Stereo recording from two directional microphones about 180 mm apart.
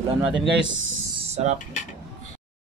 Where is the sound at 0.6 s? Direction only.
90° right.